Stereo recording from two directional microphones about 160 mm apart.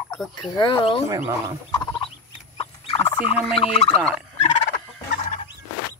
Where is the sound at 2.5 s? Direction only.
40° left (ahead or behind).